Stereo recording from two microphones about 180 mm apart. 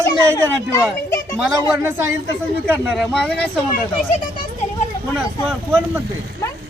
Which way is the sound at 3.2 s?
10° left (ahead or behind).